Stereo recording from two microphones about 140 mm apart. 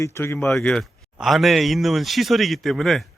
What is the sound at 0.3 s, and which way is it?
A man's voice, 5° left (ahead or behind).